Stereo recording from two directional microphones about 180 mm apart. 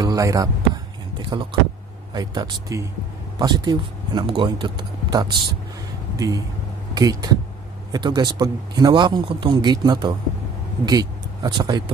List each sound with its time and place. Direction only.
0.0 s music: 20° right (ahead or behind)
1.1 s a man's voice: 25° right (ahead or behind)